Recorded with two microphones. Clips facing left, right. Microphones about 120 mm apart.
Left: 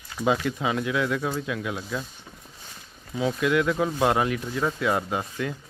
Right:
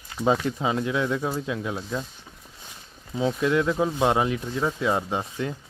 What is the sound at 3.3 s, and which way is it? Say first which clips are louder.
Speech: even; 30° right (ahead or behind).